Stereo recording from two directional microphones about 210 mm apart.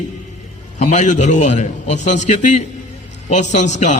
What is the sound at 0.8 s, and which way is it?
A man's voice, 35° left (ahead or behind).